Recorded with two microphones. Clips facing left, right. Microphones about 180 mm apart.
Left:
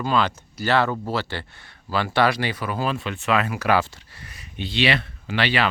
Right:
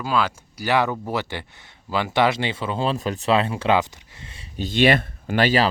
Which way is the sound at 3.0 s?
35° right (ahead or behind).